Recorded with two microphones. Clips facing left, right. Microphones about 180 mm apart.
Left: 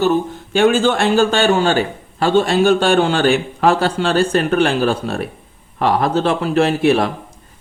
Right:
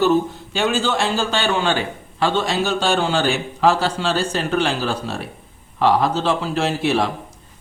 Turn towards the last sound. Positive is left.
turn(degrees=55)  # may be behind; listen again after turning